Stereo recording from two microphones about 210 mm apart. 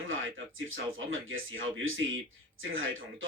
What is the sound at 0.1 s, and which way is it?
Speech, 70° right (ahead or behind).